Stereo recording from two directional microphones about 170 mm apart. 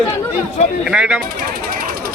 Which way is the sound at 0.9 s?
5° right (ahead or behind).